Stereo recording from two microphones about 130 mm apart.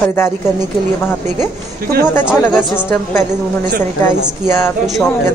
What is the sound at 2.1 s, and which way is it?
Speech, 15° left (ahead or behind).